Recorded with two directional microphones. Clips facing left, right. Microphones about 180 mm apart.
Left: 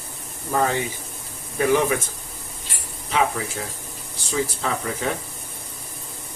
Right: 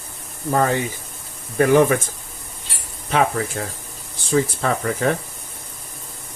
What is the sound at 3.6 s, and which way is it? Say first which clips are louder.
Speech: right 3 dB; 55° right (ahead or behind).